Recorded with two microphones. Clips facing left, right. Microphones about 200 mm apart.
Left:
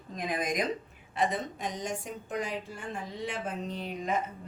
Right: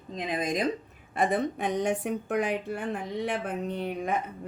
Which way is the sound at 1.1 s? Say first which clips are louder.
Right 4 dB; 55° right (ahead or behind).